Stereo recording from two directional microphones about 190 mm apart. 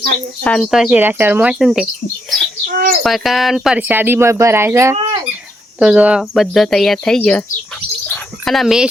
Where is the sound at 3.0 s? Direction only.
Centre (ahead or behind).